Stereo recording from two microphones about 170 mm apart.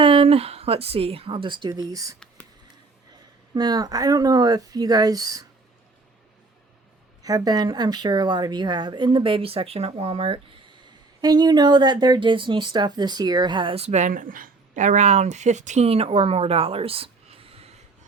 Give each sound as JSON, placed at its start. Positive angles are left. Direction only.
{"t": 0.0, "sound": "speech", "side_deg": -30}
{"t": 2.1, "sound": "a sound", "side_deg": 5}
{"t": 3.5, "sound": "speech", "side_deg": -25}
{"t": 7.2, "sound": "speech", "side_deg": -20}